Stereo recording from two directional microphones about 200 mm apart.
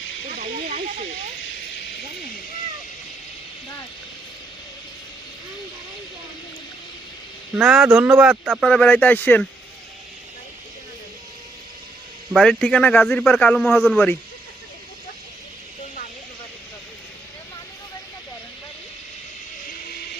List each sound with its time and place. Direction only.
0.3 s snake: 40° right (ahead or behind)
7.5 s a man's voice: 5° right (ahead or behind)
12.3 s a man's voice: 5° left (ahead or behind)